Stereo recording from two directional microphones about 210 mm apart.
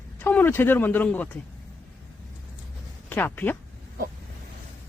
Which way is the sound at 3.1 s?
10° left (ahead or behind).